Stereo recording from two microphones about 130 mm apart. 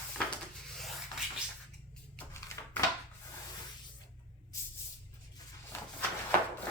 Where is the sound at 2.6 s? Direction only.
25° left (ahead or behind).